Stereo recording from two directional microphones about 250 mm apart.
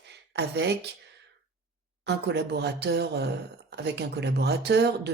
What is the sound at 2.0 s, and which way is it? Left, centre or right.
Speech, right.